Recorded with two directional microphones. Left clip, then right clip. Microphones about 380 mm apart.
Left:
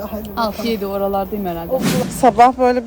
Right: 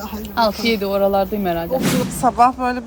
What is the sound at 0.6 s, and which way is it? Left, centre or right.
Speech, centre.